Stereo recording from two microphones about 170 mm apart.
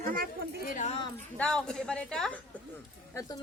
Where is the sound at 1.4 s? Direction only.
5° left (ahead or behind).